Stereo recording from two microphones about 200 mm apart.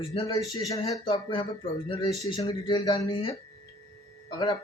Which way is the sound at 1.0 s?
25° left (ahead or behind).